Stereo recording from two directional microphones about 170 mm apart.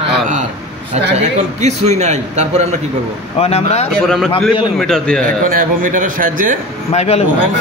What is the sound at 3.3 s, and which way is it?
Speech, 40° left (ahead or behind).